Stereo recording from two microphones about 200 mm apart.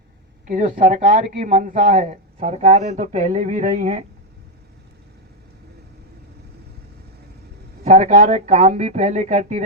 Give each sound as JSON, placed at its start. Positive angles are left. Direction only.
{"t": 0.4, "sound": "speech", "side_deg": -40}
{"t": 7.9, "sound": "speech", "side_deg": -35}